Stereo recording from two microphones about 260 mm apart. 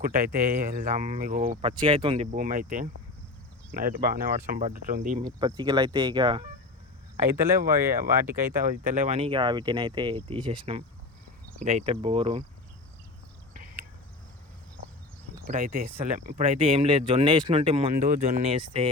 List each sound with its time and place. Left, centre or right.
0.0 s speech: right
1.8 s speech: centre
5.2 s speech: centre
9.0 s speech: right
15.4 s speech: right
18.5 s speech: centre